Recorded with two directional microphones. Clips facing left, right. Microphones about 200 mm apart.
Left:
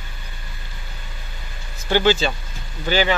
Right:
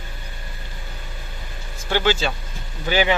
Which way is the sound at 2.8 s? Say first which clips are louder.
Even; 15° right (ahead or behind).